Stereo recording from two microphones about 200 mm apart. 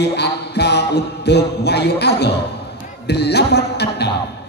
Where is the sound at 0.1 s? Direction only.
55° left (ahead or behind).